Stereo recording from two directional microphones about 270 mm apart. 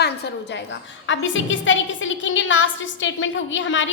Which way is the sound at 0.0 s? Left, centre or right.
Left.